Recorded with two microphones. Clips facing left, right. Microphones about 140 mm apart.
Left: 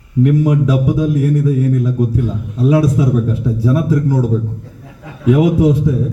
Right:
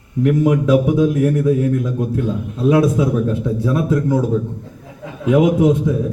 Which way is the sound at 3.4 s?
Centre (ahead or behind).